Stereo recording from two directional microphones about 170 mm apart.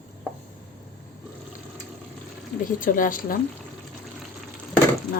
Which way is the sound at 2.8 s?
55° left (ahead or behind).